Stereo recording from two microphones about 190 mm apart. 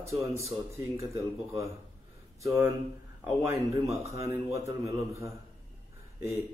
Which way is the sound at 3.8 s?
15° right (ahead or behind).